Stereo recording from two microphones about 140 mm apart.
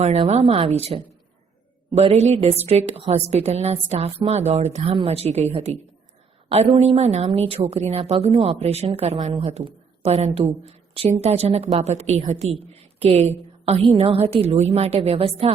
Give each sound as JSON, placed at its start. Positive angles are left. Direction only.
{"t": 0.0, "sound": "a woman's voice", "side_deg": -50}
{"t": 6.5, "sound": "a woman's voice", "side_deg": -45}
{"t": 10.6, "sound": "a sound", "side_deg": -45}
{"t": 11.2, "sound": "a woman's voice", "side_deg": -50}